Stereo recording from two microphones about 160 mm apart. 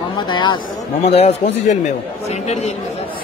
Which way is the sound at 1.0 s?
40° left (ahead or behind).